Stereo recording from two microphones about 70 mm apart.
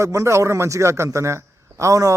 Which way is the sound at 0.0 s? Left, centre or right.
Right.